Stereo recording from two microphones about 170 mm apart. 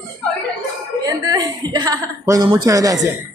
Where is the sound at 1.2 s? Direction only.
25° right (ahead or behind).